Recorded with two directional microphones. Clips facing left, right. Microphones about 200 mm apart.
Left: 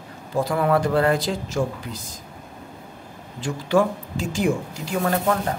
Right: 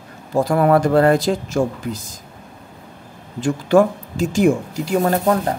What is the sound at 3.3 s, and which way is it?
Speech, 50° right (ahead or behind).